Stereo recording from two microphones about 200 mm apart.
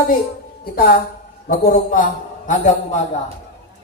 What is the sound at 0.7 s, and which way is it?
A woman's voice, 50° left (ahead or behind).